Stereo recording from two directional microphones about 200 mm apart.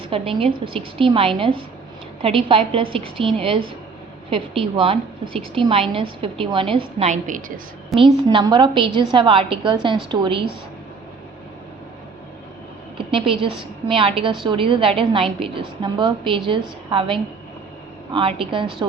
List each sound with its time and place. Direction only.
0.1 s a woman's voice: 25° right (ahead or behind)
7.9 s a woman's voice: 25° right (ahead or behind)
13.1 s a woman's voice: 25° right (ahead or behind)